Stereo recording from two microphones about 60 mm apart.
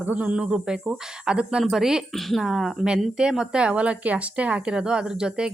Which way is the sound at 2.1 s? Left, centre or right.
Centre.